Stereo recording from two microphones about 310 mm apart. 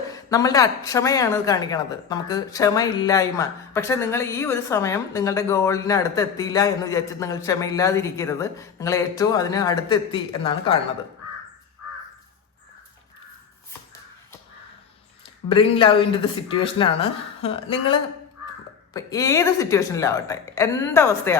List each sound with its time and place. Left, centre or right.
0.1 s speech: centre
15.4 s speech: centre